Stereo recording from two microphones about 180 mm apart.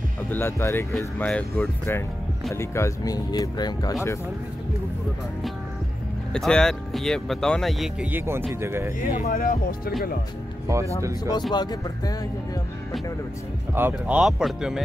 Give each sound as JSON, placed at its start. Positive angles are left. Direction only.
{"t": 0.3, "sound": "speech", "side_deg": 15}
{"t": 6.3, "sound": "speech", "side_deg": 5}
{"t": 9.3, "sound": "speech", "side_deg": 50}
{"t": 11.5, "sound": "speech", "side_deg": 20}
{"t": 13.7, "sound": "speech", "side_deg": -10}